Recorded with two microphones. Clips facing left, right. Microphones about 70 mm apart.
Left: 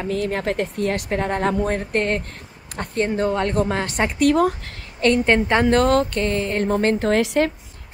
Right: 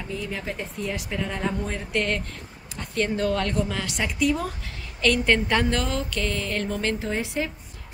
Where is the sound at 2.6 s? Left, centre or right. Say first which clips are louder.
Left 9 dB; left.